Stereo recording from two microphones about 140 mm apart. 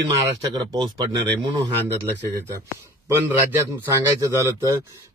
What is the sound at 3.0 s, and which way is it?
Speech, 15° right (ahead or behind).